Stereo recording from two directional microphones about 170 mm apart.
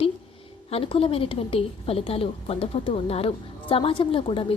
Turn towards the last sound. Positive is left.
turn(degrees=30)  # may be behind; listen again after turning